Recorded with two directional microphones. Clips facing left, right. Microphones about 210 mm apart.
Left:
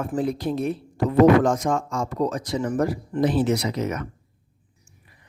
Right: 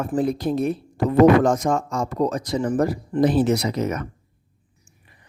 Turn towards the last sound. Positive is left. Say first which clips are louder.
# right 2 dB
turn(degrees=-40)  # may be behind; listen again after turning